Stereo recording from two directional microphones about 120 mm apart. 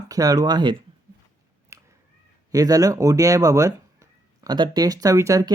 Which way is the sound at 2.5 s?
30° right (ahead or behind).